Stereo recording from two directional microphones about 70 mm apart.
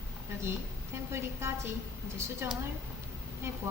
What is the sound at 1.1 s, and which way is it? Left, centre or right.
A woman's voice, right.